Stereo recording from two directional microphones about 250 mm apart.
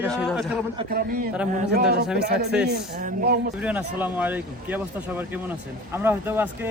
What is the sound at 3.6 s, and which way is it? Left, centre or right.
Speech, centre.